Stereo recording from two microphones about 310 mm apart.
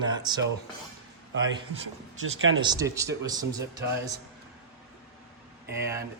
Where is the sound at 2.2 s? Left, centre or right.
Right.